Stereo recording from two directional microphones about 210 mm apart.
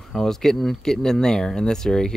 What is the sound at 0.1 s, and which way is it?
Speech, centre (ahead or behind).